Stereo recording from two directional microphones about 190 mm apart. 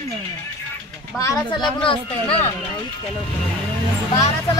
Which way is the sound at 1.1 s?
20° left (ahead or behind).